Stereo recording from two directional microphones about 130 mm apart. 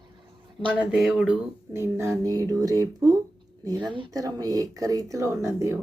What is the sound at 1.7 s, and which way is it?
Speech, 20° right (ahead or behind).